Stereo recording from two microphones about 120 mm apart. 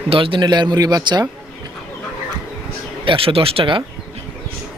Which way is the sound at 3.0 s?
45° right (ahead or behind).